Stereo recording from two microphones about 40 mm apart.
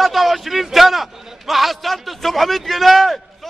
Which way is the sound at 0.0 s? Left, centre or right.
Centre.